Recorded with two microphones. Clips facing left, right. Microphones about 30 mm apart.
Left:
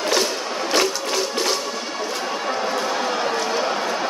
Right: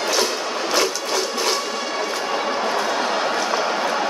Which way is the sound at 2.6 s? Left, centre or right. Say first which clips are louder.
Right 1 dB; centre.